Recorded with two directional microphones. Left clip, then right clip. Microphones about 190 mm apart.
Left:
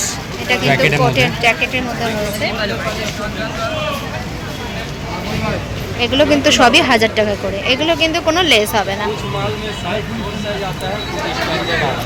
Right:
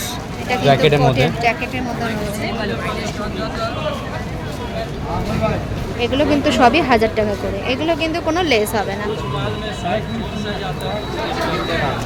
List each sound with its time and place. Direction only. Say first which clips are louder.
0.4 s speech: left 2 dB; centre (ahead or behind)
0.7 s speech: right 1 dB; 45° right (ahead or behind)
1.4 s speech: left 4 dB; 5° left (ahead or behind)
6.0 s speech: left 4 dB; centre (ahead or behind)